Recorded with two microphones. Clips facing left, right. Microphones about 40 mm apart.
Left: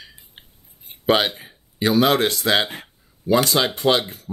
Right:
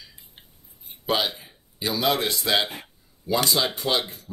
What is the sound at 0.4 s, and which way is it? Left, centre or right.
Cutlery, left.